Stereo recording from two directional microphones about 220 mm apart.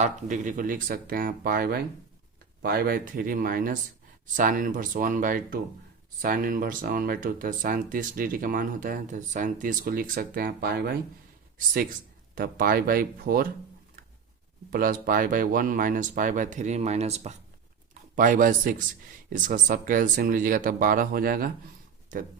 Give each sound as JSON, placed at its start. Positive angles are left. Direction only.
{"t": 0.0, "sound": "speech", "side_deg": -35}
{"t": 14.7, "sound": "speech", "side_deg": -40}